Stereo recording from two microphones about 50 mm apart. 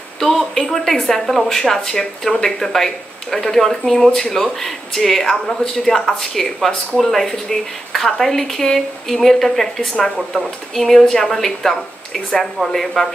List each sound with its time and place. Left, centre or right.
0.2 s speech: centre
9.8 s speech: centre
10.1 s speech: centre